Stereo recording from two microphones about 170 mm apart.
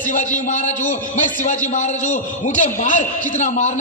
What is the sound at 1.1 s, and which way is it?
A man's voice, 45° left (ahead or behind).